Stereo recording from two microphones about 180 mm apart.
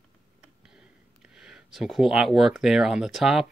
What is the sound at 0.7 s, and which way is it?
Speech, 5° right (ahead or behind).